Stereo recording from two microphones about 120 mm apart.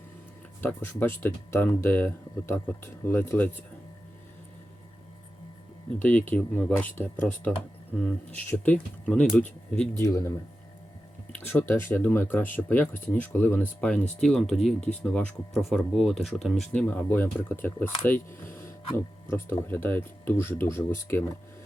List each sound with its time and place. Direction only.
0.6 s speech: 15° left (ahead or behind)
6.0 s speech: 15° left (ahead or behind)
8.3 s speech: 15° left (ahead or behind)
10.0 s speech: 25° left (ahead or behind)